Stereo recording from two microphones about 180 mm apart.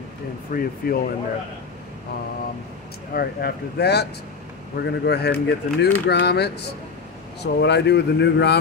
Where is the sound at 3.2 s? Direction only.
60° left (ahead or behind).